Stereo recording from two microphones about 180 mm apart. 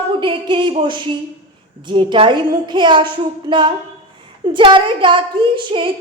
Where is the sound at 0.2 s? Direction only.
25° right (ahead or behind).